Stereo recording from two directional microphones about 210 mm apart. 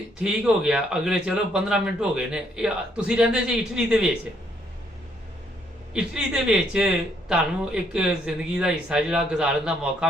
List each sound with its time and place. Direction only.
0.2 s speech: 5° right (ahead or behind)
5.9 s speech: 5° right (ahead or behind)